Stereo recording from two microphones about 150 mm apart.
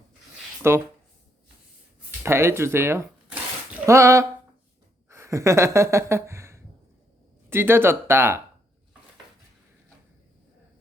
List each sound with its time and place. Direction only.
0.6 s speech: 15° right (ahead or behind)
2.2 s speech: 15° right (ahead or behind)
3.8 s a sound: 20° right (ahead or behind)
7.5 s speech: 15° right (ahead or behind)